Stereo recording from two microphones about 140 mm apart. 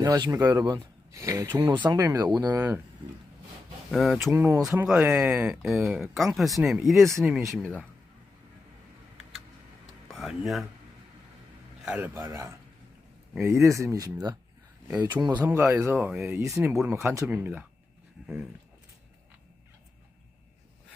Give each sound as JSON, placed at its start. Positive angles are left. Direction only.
{"t": 0.0, "sound": "speech", "side_deg": -25}
{"t": 3.9, "sound": "speech", "side_deg": 0}
{"t": 4.3, "sound": "speech", "side_deg": -20}
{"t": 4.9, "sound": "speech", "side_deg": -5}
{"t": 10.1, "sound": "speech", "side_deg": 0}
{"t": 11.9, "sound": "speech", "side_deg": -15}
{"t": 15.4, "sound": "speech", "side_deg": -15}
{"t": 16.3, "sound": "speech", "side_deg": -20}
{"t": 16.7, "sound": "speech", "side_deg": -10}